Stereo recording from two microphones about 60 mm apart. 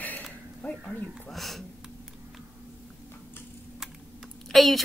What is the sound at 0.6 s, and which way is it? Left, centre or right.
Speech, left.